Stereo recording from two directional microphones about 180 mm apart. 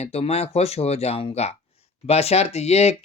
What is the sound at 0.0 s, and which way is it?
Speech, 35° left (ahead or behind).